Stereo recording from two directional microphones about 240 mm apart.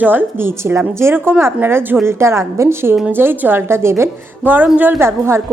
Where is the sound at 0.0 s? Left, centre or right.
Centre.